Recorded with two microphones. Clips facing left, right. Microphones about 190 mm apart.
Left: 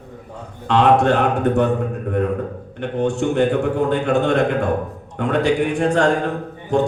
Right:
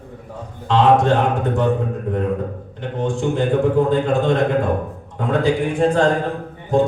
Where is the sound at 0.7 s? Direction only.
70° left (ahead or behind).